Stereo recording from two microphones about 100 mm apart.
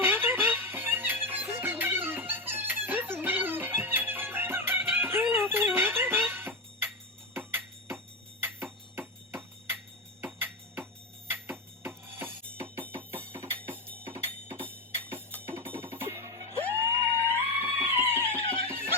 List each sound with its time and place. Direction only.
0.0 s music: 20° right (ahead or behind)
7.3 s a sound: 25° right (ahead or behind)
11.3 s music: 20° right (ahead or behind)